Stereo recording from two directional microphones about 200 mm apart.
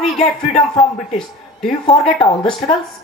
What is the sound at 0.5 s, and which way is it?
Speech, 30° left (ahead or behind).